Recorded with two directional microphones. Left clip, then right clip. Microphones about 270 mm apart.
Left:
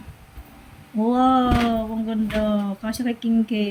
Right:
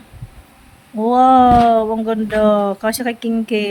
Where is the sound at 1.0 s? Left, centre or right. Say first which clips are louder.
Right 9 dB; centre.